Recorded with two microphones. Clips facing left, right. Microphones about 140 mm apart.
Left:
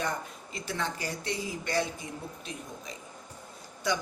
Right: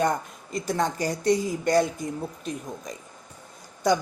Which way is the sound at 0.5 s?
40° right (ahead or behind).